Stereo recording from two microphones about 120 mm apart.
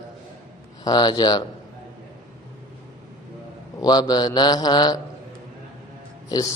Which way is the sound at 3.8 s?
35° left (ahead or behind).